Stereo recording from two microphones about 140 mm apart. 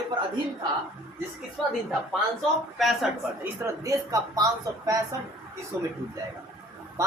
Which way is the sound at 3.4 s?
25° right (ahead or behind).